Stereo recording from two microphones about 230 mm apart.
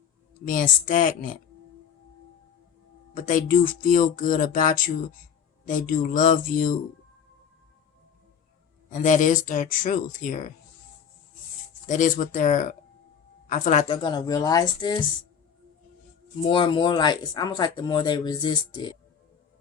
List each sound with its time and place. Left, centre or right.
0.4 s speech: left
3.2 s speech: left
8.9 s speech: left
11.9 s speech: left; by 15.0 s centre
16.4 s speech: left